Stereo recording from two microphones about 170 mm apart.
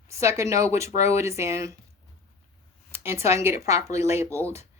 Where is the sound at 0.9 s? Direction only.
40° left (ahead or behind).